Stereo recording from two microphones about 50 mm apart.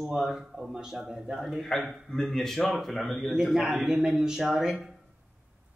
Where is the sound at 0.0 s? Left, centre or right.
Centre.